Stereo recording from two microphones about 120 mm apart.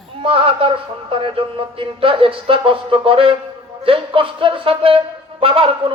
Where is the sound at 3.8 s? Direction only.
50° right (ahead or behind).